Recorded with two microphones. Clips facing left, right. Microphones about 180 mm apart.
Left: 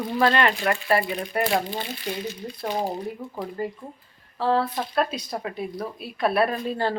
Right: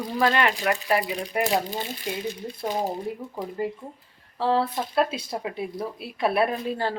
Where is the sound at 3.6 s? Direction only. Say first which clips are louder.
Right 1 dB; 20° right (ahead or behind).